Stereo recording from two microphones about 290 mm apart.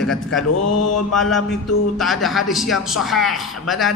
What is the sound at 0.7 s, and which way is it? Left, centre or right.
Mantra, left.